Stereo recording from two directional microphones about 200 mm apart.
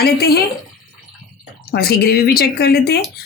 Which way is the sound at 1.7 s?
50° left (ahead or behind).